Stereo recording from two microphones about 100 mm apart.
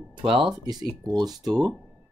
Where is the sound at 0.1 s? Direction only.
60° right (ahead or behind).